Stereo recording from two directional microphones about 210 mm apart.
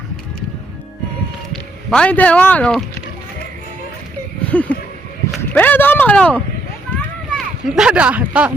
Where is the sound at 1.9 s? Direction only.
5° left (ahead or behind).